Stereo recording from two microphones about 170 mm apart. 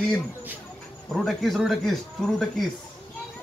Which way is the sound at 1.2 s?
Centre (ahead or behind).